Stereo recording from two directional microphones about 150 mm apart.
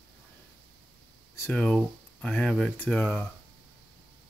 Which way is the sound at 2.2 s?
5° left (ahead or behind).